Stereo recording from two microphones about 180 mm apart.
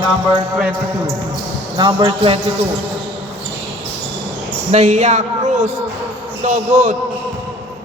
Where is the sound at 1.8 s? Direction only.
25° right (ahead or behind).